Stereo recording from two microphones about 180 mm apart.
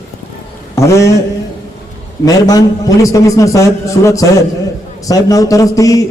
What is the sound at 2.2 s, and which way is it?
A man's voice, 20° left (ahead or behind).